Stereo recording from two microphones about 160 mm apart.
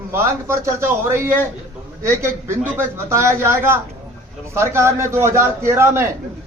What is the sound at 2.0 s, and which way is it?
A man's voice, 15° right (ahead or behind).